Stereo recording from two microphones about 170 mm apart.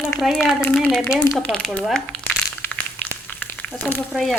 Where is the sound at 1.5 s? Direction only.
5° left (ahead or behind).